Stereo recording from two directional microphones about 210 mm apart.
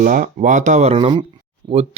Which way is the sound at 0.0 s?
40° right (ahead or behind).